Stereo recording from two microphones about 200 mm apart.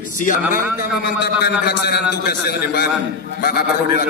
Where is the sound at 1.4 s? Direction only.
55° left (ahead or behind).